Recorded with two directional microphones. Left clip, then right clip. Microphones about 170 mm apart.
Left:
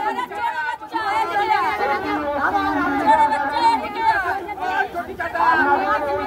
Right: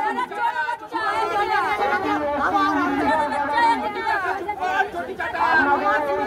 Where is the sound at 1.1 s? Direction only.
15° right (ahead or behind).